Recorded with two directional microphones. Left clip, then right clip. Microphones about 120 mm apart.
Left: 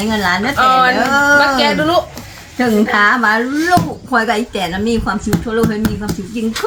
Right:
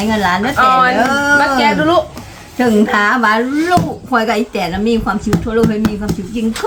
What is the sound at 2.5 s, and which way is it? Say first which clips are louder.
A woman's voice: even; 35° right (ahead or behind).